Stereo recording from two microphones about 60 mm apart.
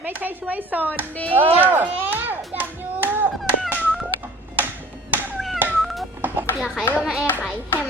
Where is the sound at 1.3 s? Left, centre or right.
Right.